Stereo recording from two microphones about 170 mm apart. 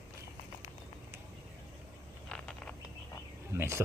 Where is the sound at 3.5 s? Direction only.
15° right (ahead or behind).